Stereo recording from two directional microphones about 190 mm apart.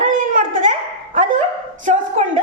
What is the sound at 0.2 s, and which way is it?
Dog, 45° right (ahead or behind).